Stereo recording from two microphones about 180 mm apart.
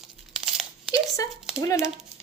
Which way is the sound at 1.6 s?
15° left (ahead or behind).